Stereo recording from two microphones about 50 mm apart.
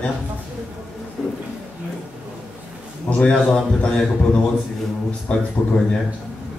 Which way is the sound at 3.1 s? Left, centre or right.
Left.